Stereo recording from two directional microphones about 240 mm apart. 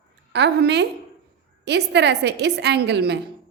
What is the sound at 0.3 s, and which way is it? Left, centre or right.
A woman's voice, right.